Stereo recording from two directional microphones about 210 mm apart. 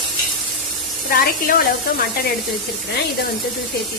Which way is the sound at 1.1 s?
45° left (ahead or behind).